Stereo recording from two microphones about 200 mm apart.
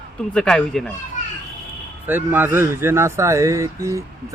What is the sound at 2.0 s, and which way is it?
Speech, 10° right (ahead or behind).